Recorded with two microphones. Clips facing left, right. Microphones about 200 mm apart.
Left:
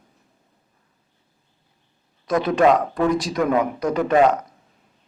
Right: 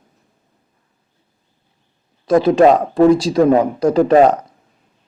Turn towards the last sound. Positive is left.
turn(degrees=-35)  # may be behind; listen again after turning